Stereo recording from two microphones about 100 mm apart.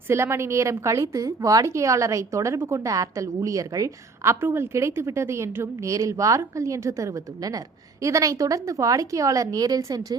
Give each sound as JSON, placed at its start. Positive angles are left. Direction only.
{"t": 0.1, "sound": "a woman's voice", "side_deg": -25}